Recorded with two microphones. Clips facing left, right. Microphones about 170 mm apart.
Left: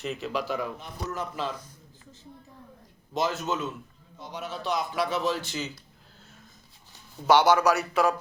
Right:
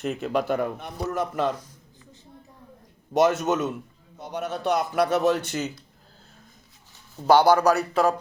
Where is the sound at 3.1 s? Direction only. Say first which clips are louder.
Right 8 dB; 70° right (ahead or behind).